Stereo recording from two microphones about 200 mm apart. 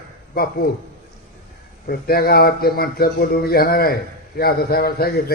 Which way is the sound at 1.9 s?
50° left (ahead or behind).